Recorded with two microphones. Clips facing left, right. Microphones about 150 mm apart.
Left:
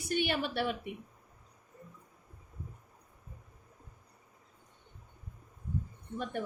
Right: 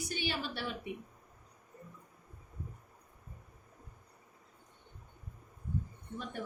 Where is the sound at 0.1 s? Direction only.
55° left (ahead or behind).